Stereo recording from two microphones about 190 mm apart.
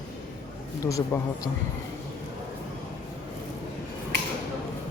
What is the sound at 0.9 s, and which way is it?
Speech, 15° left (ahead or behind).